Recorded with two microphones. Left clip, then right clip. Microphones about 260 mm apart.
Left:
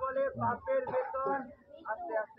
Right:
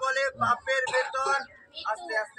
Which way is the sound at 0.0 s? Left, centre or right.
Right.